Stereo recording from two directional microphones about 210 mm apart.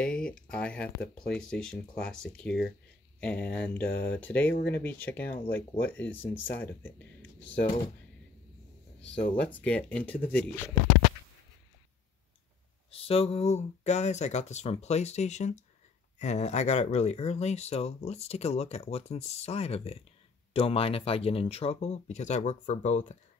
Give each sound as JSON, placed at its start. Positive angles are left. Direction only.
{"t": 0.0, "sound": "speech", "side_deg": 5}
{"t": 3.9, "sound": "speech", "side_deg": 55}
{"t": 4.2, "sound": "speech", "side_deg": 10}
{"t": 9.4, "sound": "speech", "side_deg": 5}
{"t": 12.9, "sound": "speech", "side_deg": 30}